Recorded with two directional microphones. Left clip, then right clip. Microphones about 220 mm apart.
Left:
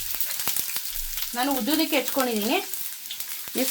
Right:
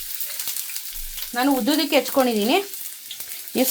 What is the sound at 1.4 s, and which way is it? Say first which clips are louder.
Frying: right 4 dB; 50° right (ahead or behind).